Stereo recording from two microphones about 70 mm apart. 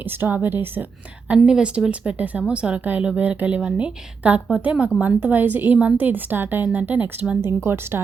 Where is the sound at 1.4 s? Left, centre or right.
Centre.